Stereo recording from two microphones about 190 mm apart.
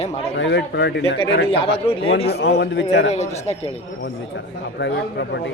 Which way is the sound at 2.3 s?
60° left (ahead or behind).